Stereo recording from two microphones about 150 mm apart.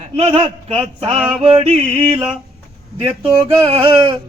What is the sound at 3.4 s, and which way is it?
Speech, 35° right (ahead or behind).